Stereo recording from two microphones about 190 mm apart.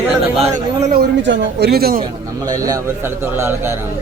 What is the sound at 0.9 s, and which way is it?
A man's voice, 60° right (ahead or behind).